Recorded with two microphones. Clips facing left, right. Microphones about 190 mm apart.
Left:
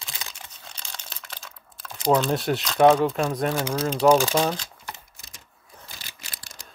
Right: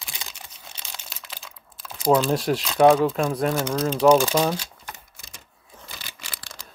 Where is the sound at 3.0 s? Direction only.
Centre (ahead or behind).